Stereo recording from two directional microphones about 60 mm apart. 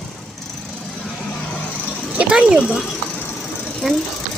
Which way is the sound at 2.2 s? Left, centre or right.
Centre.